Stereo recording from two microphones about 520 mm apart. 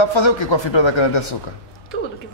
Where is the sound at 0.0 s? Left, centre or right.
Left.